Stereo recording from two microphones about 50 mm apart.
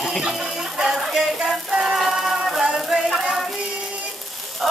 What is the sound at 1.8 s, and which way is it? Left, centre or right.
Music, centre.